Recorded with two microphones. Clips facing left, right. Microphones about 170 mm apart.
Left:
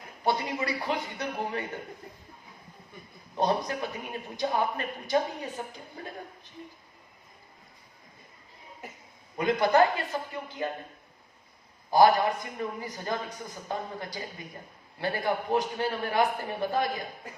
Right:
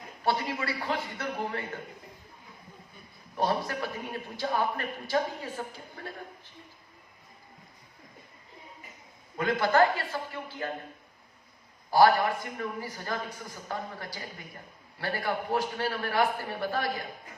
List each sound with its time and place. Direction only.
0.3 s a man's voice: 15° left (ahead or behind)
3.3 s a man's voice: 20° left (ahead or behind)
9.4 s a man's voice: 20° left (ahead or behind)
11.9 s a man's voice: 20° left (ahead or behind)